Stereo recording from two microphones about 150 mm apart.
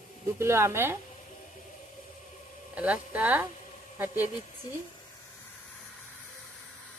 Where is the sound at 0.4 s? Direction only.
15° right (ahead or behind).